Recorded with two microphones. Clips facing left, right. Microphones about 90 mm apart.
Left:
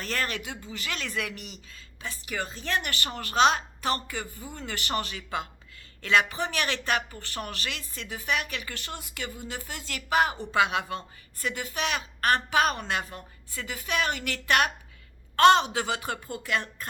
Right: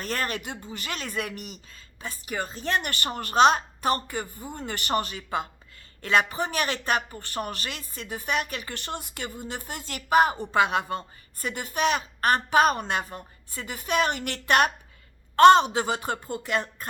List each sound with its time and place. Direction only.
0.0 s speech: 45° right (ahead or behind)
15.5 s speech: 35° right (ahead or behind)